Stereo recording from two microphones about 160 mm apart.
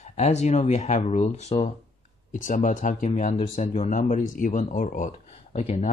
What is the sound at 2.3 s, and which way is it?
Speech, 55° left (ahead or behind).